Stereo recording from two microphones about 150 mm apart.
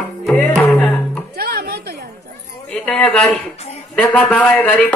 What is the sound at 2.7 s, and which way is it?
A man's voice, 5° left (ahead or behind).